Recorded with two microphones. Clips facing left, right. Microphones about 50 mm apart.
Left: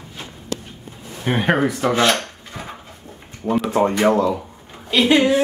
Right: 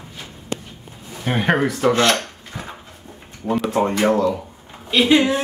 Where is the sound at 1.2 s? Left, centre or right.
Centre.